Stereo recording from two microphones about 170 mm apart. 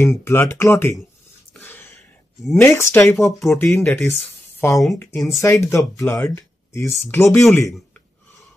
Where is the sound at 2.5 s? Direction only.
15° left (ahead or behind).